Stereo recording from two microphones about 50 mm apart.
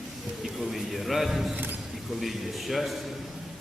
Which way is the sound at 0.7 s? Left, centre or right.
Centre.